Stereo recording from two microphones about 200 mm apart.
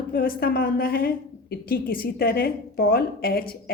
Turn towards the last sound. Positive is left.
turn(degrees=50)  # may be behind; listen again after turning